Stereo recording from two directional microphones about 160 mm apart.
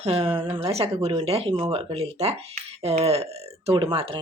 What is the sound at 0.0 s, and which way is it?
Speech, 35° right (ahead or behind).